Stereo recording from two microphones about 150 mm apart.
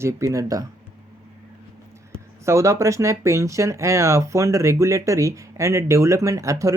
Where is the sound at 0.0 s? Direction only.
20° right (ahead or behind).